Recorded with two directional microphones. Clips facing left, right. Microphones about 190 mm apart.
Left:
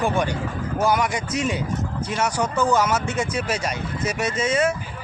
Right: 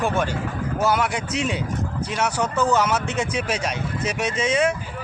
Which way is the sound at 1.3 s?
10° left (ahead or behind).